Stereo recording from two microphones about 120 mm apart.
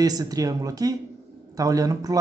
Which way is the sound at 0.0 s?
30° right (ahead or behind).